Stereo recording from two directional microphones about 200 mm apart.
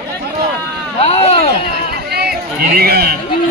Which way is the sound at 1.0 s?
30° left (ahead or behind).